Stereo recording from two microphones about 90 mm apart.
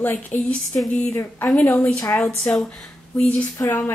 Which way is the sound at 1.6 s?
15° left (ahead or behind).